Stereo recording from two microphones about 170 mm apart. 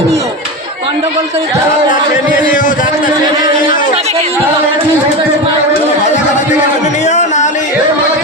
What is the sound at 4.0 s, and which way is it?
Chatter, 35° right (ahead or behind).